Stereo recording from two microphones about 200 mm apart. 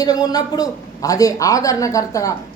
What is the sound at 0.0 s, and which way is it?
A man's voice, 20° left (ahead or behind).